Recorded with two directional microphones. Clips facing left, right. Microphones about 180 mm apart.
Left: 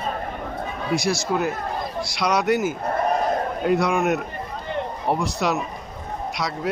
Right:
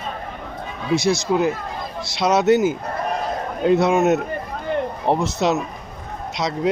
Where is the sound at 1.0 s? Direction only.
20° right (ahead or behind).